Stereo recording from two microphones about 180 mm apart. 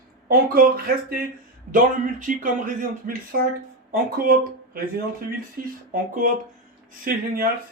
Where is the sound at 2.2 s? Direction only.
45° right (ahead or behind).